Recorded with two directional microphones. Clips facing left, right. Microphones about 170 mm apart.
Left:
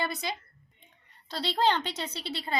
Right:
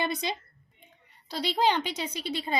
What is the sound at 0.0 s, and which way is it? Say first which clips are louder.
A woman's voice: right 3 dB; 20° right (ahead or behind).